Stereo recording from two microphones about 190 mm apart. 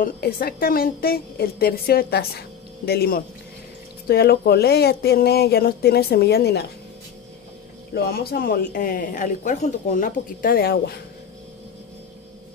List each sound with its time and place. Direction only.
0.0 s a woman's voice: 50° left (ahead or behind)
7.9 s a woman's voice: 55° left (ahead or behind)